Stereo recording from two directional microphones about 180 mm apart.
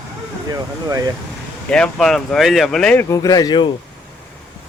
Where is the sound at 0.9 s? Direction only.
20° right (ahead or behind).